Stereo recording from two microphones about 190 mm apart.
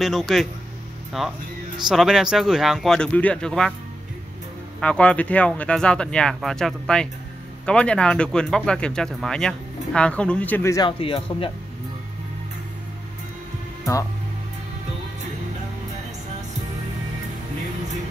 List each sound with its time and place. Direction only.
0.0 s speech: centre (ahead or behind)
4.7 s speech: 5° left (ahead or behind)
10.9 s speech: 30° left (ahead or behind)